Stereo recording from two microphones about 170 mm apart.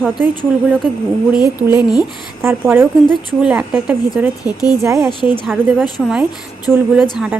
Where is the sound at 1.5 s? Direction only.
10° right (ahead or behind).